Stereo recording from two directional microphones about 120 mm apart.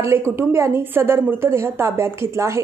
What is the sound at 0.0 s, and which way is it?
Speech, 20° right (ahead or behind).